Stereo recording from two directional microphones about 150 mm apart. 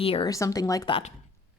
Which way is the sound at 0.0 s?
40° left (ahead or behind).